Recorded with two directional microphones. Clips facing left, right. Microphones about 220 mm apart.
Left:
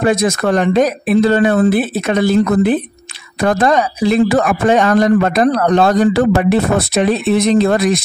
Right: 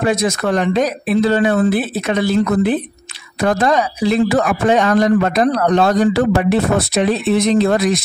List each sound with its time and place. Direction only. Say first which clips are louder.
0.0 s speech: left 3 dB; 50° left (ahead or behind)